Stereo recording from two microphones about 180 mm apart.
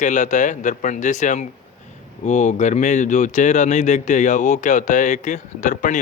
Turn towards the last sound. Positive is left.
turn(degrees=45)  # may be behind; listen again after turning